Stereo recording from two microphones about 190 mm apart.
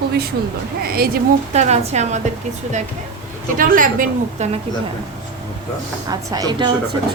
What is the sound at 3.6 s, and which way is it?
Speech, 45° right (ahead or behind).